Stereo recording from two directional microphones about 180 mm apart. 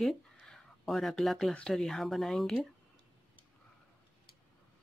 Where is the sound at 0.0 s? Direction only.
Centre (ahead or behind).